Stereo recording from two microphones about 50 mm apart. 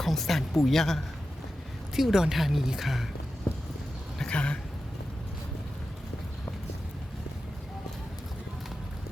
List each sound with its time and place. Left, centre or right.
0.0 s speech: centre
2.0 s speech: centre
4.3 s speech: left